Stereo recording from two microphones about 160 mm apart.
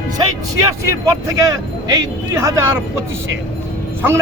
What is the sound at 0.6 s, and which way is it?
Speech, 20° right (ahead or behind).